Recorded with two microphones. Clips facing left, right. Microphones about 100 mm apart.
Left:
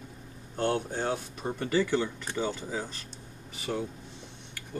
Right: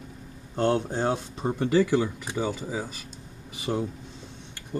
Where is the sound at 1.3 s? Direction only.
25° right (ahead or behind).